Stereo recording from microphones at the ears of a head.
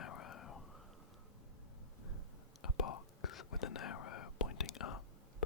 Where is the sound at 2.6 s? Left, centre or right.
Left.